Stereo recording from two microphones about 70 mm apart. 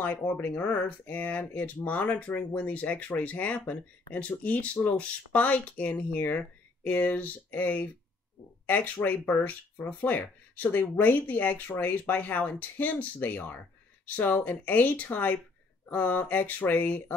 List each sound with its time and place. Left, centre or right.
0.0 s speech: left